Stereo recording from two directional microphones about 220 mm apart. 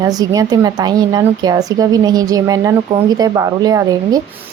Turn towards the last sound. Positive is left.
turn(degrees=-15)  # may be behind; listen again after turning